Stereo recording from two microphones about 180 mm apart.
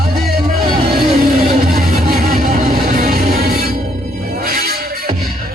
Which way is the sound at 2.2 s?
55° right (ahead or behind).